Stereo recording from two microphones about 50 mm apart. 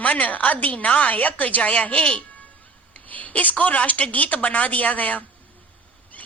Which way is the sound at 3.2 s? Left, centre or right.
Left.